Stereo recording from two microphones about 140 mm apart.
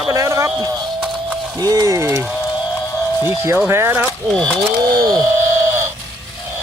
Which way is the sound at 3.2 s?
15° right (ahead or behind).